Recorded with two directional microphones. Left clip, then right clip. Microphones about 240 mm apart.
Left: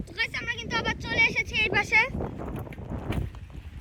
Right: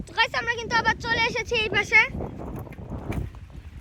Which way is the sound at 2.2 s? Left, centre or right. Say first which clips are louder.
Even; centre.